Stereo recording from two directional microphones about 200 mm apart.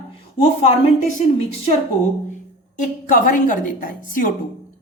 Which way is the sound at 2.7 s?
40° left (ahead or behind).